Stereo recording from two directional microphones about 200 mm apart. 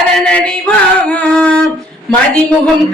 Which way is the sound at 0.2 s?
5° left (ahead or behind).